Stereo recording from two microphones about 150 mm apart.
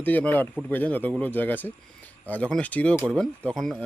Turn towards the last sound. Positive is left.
turn(degrees=5)  # may be behind; listen again after turning